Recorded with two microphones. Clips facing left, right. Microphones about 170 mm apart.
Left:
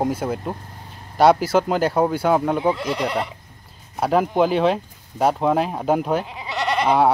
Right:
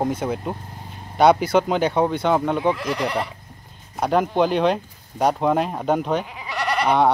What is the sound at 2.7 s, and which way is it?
Speech, 25° left (ahead or behind).